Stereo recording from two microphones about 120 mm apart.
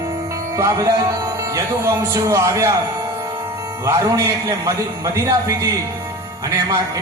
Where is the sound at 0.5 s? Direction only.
25° right (ahead or behind).